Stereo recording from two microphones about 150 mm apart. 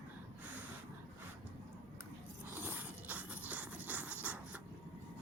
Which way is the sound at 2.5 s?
15° right (ahead or behind).